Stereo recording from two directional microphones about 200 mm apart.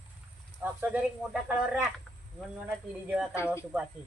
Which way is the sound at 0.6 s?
10° right (ahead or behind).